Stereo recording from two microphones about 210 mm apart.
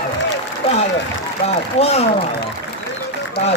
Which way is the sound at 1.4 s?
30° left (ahead or behind).